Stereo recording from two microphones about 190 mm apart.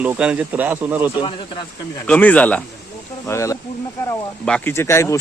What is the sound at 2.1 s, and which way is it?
Speech, 5° left (ahead or behind).